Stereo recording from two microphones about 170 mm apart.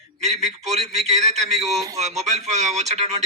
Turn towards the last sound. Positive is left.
turn(degrees=-40)  # may be behind; listen again after turning